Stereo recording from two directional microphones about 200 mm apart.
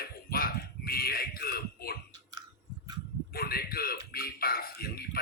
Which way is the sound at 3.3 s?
50° left (ahead or behind).